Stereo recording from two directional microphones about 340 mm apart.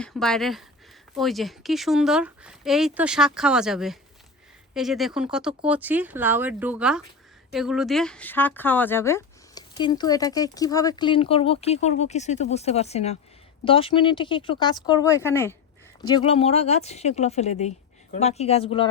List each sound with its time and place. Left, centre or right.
0.0 s speech: centre